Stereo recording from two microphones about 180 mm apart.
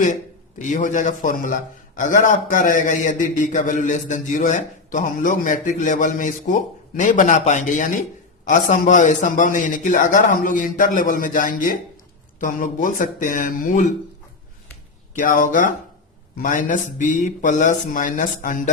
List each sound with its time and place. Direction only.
0.6 s a man's voice: 45° left (ahead or behind)
15.2 s a man's voice: 45° left (ahead or behind)